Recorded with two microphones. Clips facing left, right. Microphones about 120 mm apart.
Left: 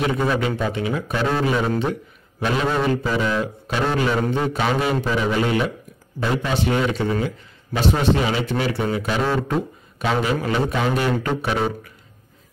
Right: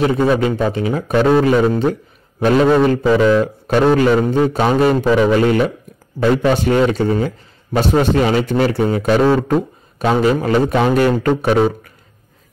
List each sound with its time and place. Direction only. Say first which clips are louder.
0.0 s a man's voice: right 6 dB; 30° right (ahead or behind); by 5.6 s 55° right (ahead or behind)
6.5 s a man's voice: right 6 dB; 40° right (ahead or behind)